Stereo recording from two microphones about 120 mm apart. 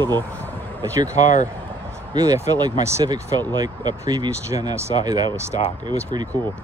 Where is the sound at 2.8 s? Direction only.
25° right (ahead or behind).